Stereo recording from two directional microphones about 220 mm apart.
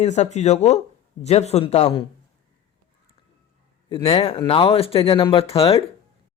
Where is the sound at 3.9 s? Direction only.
25° left (ahead or behind).